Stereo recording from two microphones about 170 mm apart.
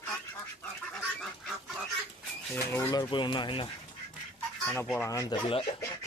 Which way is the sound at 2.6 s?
15° left (ahead or behind).